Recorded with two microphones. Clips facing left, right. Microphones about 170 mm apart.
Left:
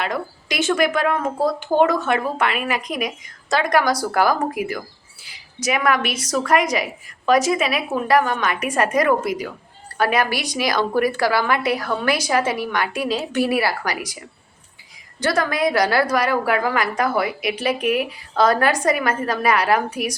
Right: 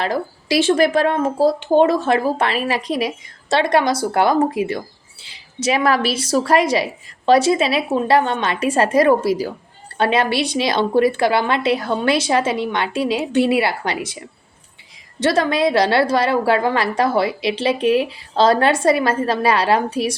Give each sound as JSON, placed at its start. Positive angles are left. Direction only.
{"t": 0.0, "sound": "a woman's voice", "side_deg": -30}